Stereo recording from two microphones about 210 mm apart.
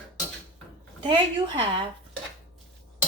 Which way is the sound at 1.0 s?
20° right (ahead or behind).